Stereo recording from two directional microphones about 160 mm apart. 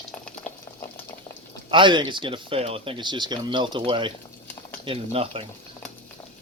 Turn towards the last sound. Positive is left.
turn(degrees=-35)  # may be behind; listen again after turning